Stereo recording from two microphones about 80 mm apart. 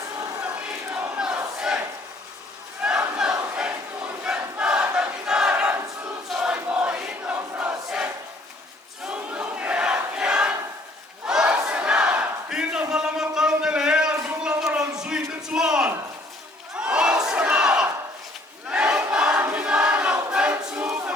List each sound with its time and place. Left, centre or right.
0.4 s battle cry: centre
2.8 s battle cry: centre
4.6 s crowd: centre
6.2 s crowd: centre
6.5 s crowd: centre
11.3 s battle cry: centre
12.9 s a sound: centre
16.7 s crowd: centre
19.5 s a sound: centre
20.3 s choir: centre